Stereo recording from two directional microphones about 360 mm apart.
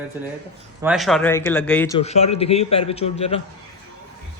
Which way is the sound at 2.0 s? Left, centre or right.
Centre.